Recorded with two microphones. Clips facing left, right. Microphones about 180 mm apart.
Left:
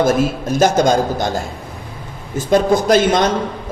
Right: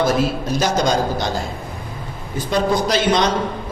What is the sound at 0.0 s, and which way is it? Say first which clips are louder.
A man's voice: left 3 dB; 50° left (ahead or behind).